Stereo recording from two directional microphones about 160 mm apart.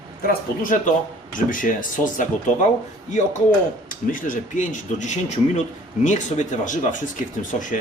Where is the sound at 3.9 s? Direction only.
60° left (ahead or behind).